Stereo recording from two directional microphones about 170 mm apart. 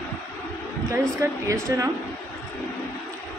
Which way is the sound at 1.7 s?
20° right (ahead or behind).